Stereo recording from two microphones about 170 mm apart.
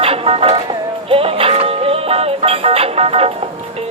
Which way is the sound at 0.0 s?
35° right (ahead or behind).